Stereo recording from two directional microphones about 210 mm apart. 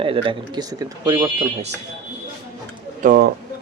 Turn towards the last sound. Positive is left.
turn(degrees=-45)  # may be behind; listen again after turning